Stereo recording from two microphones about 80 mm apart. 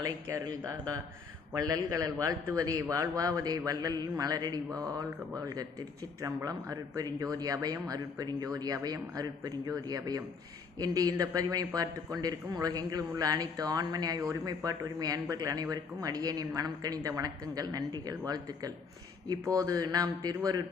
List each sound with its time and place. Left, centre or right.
0.0 s a man's voice: right